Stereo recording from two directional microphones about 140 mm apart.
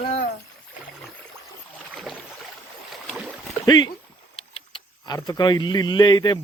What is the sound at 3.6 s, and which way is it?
Speech, 30° left (ahead or behind).